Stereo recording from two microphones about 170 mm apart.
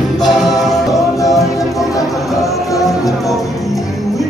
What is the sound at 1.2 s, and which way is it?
Music, 20° left (ahead or behind).